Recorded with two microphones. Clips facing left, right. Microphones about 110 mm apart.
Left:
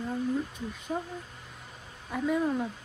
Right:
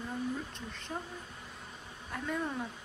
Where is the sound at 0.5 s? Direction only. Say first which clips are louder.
Left 7 dB; 10° left (ahead or behind).